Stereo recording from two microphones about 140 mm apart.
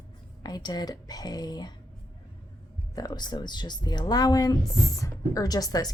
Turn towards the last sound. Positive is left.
turn(degrees=25)  # may be behind; listen again after turning